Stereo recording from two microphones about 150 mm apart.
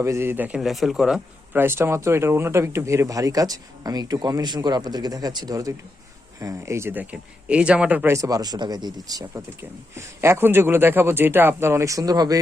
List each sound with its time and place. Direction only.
0.0 s speech: 15° right (ahead or behind)
1.6 s speech: 15° right (ahead or behind)